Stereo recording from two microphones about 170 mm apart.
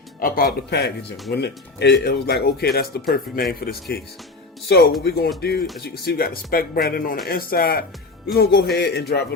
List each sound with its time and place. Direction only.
0.2 s speech: 55° left (ahead or behind); by 9.2 s 75° left (ahead or behind)